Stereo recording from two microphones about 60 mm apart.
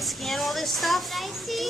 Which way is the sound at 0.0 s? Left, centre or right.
Centre.